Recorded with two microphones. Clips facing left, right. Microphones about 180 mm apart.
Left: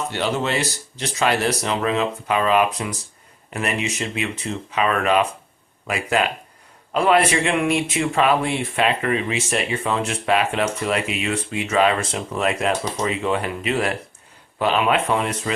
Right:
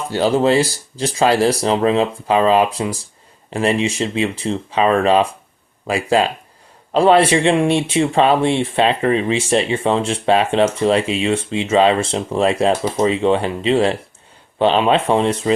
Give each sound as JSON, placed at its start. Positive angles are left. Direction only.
{"t": 0.1, "sound": "speech", "side_deg": -35}